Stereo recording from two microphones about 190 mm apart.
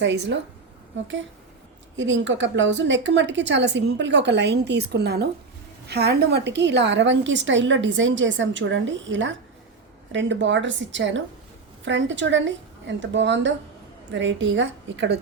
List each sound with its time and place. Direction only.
0.0 s a woman's voice: 65° right (ahead or behind)
2.0 s a woman's voice: 75° right (ahead or behind)